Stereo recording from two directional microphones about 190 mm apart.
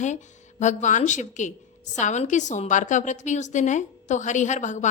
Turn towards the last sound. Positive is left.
turn(degrees=40)  # may be behind; listen again after turning